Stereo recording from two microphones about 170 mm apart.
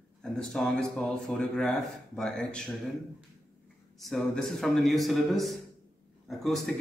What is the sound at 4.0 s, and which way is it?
A man's voice, centre (ahead or behind).